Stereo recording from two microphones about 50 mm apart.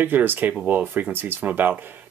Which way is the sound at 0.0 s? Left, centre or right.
Right.